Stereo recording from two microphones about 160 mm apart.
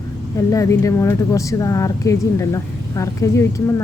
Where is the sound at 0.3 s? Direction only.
20° left (ahead or behind).